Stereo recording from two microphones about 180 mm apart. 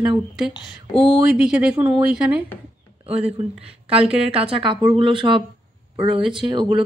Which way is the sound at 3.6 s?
35° right (ahead or behind).